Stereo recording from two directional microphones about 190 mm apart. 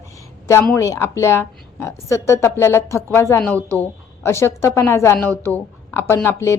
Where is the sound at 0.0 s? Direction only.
15° left (ahead or behind).